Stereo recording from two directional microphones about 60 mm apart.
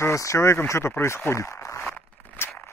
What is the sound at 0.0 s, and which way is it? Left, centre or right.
Speech, left.